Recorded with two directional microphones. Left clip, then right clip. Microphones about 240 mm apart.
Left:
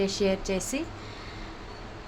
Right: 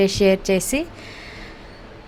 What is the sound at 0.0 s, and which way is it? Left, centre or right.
Speech, right.